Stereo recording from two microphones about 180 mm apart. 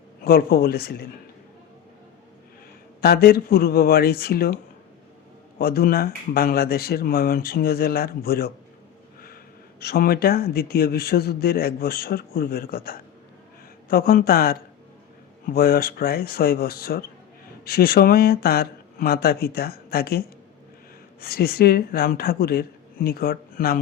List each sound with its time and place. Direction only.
0.2 s speech: 60° left (ahead or behind)
3.0 s speech: 60° left (ahead or behind)
9.8 s speech: 60° left (ahead or behind)